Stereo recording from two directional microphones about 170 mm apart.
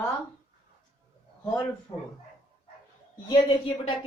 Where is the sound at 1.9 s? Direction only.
25° left (ahead or behind).